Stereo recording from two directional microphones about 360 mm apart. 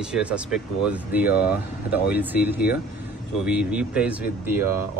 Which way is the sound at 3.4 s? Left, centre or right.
Centre.